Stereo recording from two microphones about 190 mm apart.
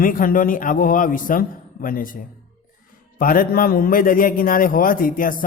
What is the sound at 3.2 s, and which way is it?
A man's voice, 50° left (ahead or behind).